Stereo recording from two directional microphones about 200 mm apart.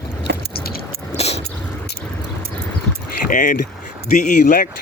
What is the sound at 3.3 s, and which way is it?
Speech, 40° left (ahead or behind).